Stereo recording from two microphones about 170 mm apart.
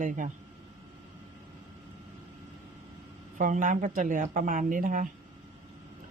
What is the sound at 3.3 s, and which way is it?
Speech, 50° right (ahead or behind).